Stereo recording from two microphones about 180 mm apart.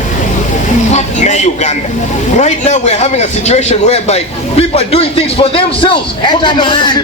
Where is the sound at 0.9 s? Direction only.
40° left (ahead or behind).